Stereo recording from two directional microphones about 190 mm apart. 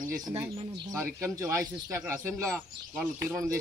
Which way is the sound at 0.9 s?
15° right (ahead or behind).